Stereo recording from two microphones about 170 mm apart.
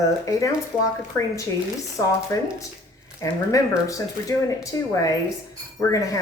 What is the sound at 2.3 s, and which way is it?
Speech, 15° left (ahead or behind).